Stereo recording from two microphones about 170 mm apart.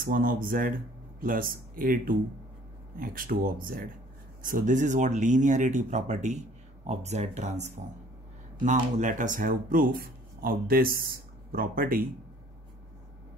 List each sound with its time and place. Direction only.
0.0 s speech: 55° right (ahead or behind)